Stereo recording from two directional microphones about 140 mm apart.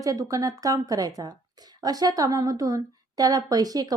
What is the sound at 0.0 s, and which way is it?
Speech, 25° right (ahead or behind).